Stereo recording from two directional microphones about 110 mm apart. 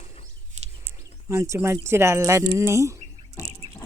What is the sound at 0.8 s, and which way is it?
Bird, 20° right (ahead or behind).